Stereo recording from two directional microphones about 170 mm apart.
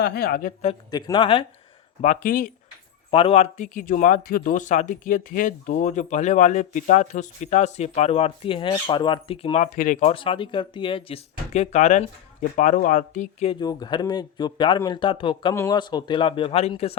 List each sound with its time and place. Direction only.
0.0 s speech: 70° left (ahead or behind)
0.9 s speech: 25° left (ahead or behind)
2.0 s speech: 50° left (ahead or behind)
3.1 s speech: 35° left (ahead or behind)
9.7 s speech: 50° left (ahead or behind)
10.1 s speech: 30° left (ahead or behind); by 13.5 s 50° left (ahead or behind)
13.5 s speech: 25° left (ahead or behind)